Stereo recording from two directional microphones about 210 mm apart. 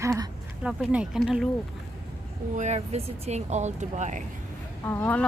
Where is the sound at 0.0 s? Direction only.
15° right (ahead or behind).